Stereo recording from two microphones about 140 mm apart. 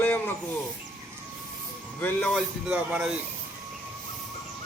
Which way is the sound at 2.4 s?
5° right (ahead or behind).